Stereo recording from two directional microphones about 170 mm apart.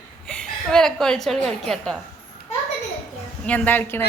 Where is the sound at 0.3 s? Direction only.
5° left (ahead or behind).